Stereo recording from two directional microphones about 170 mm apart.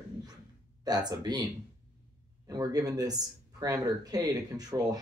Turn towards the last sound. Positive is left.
turn(degrees=-20)  # may be behind; listen again after turning